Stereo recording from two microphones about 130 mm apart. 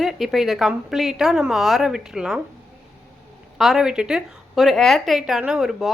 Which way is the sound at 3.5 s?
5° right (ahead or behind).